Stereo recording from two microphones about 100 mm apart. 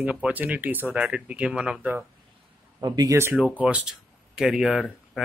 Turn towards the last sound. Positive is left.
turn(degrees=0)  # may be behind; listen again after turning